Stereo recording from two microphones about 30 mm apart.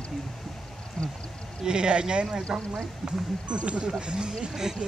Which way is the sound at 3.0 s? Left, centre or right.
Right.